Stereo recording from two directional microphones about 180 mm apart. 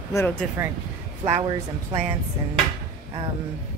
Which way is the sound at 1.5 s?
35° right (ahead or behind).